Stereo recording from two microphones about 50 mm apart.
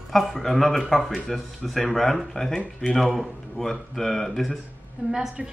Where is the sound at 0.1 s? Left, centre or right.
Centre.